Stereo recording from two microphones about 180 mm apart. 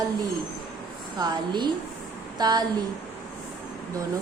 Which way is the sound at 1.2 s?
25° right (ahead or behind).